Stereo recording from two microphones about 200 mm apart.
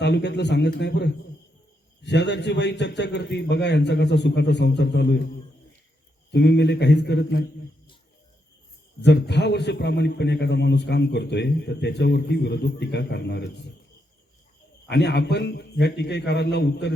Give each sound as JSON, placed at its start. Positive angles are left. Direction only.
{"t": 0.0, "sound": "a man's voice", "side_deg": 60}
{"t": 6.3, "sound": "a man's voice", "side_deg": 55}
{"t": 9.0, "sound": "a man's voice", "side_deg": 60}
{"t": 14.8, "sound": "a man's voice", "side_deg": 55}